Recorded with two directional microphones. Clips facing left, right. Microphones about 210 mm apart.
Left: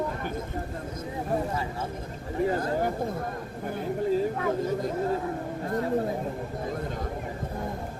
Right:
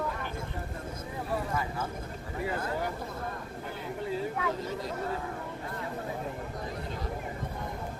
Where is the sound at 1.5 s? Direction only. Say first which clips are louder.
Left 2 dB; 30° left (ahead or behind).